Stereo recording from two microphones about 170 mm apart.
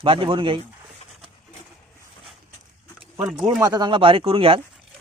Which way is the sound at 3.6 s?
25° right (ahead or behind).